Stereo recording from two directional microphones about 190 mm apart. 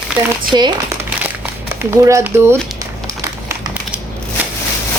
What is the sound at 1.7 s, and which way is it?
Speech, 15° right (ahead or behind).